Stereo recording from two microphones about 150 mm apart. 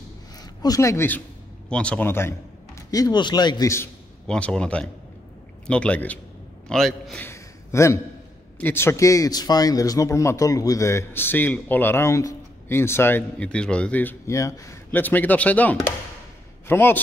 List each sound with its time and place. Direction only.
0.4 s speech: 25° left (ahead or behind)
2.9 s speech: 25° left (ahead or behind)
4.3 s a man's voice: 5° left (ahead or behind)
7.2 s a sound: 20° left (ahead or behind)
8.5 s speech: 15° left (ahead or behind)